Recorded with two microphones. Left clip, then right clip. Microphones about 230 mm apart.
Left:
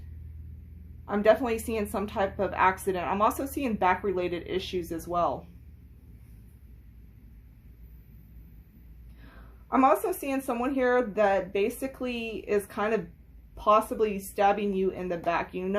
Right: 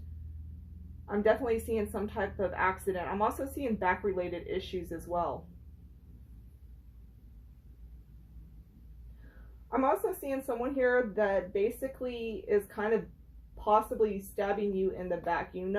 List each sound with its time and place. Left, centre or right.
1.0 s a woman's voice: left
9.6 s a woman's voice: left